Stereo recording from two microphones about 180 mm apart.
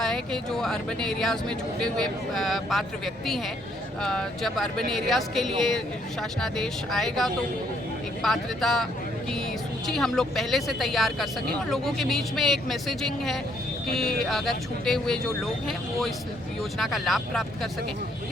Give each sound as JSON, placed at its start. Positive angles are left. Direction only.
{"t": 0.6, "sound": "speech", "side_deg": 0}
{"t": 4.0, "sound": "speech", "side_deg": 5}